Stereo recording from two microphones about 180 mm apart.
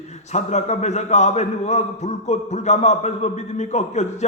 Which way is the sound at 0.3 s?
40° left (ahead or behind).